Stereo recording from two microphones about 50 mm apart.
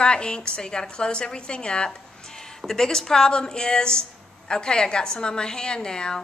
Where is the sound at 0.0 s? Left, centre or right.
Centre.